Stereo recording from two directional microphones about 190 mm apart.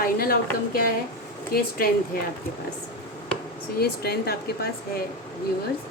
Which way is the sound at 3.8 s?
55° left (ahead or behind).